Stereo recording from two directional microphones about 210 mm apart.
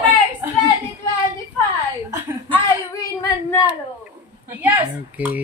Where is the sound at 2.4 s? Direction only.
15° left (ahead or behind).